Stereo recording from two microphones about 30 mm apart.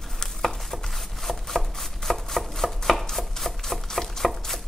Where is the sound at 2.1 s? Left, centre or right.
Centre.